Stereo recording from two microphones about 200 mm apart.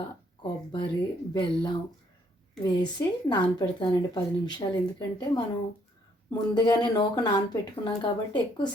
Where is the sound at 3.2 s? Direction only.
20° left (ahead or behind).